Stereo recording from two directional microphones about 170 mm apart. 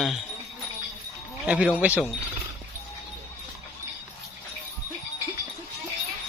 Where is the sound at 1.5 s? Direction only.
5° right (ahead or behind).